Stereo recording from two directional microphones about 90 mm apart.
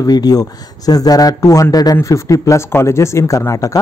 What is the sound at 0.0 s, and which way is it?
Speech, 45° left (ahead or behind).